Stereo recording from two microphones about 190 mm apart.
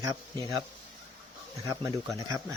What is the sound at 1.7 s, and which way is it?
Speech, 15° right (ahead or behind).